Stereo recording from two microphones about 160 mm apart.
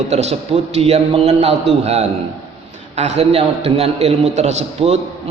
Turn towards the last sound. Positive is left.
turn(degrees=-45)  # may be behind; listen again after turning